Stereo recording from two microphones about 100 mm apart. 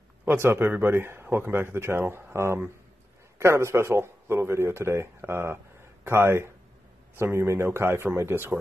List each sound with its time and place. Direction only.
0.2 s speech: 20° right (ahead or behind)